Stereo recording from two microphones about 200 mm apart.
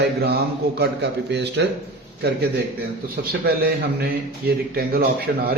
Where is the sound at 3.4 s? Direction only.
50° right (ahead or behind).